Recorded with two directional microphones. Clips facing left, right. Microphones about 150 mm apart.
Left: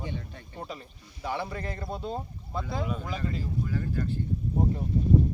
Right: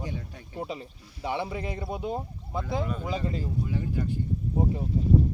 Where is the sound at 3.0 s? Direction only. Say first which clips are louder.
Right 2 dB; 20° right (ahead or behind).